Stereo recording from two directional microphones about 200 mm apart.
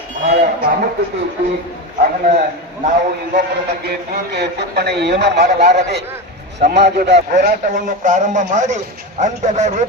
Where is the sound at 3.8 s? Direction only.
55° right (ahead or behind).